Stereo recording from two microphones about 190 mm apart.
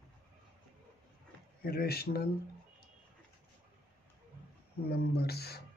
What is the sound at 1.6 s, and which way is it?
Speech, 55° left (ahead or behind).